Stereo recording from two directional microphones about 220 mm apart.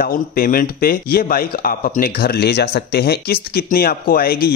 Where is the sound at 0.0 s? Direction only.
40° left (ahead or behind).